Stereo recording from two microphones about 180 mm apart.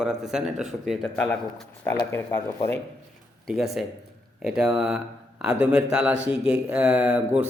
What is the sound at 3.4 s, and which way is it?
A man's voice, centre (ahead or behind).